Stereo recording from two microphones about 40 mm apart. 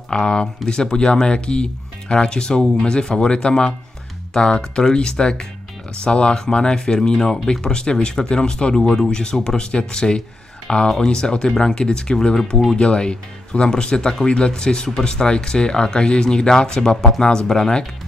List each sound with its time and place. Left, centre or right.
0.1 s speech: centre
12.7 s speech: left